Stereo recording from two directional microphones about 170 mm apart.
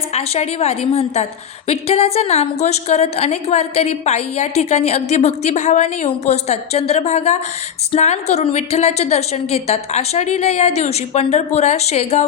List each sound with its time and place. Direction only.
0.1 s a woman's voice: 40° left (ahead or behind)